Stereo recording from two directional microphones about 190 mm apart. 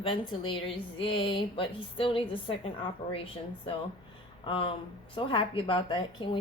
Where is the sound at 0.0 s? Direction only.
25° left (ahead or behind).